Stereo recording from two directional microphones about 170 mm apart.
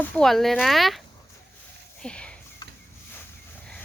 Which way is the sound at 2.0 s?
5° left (ahead or behind).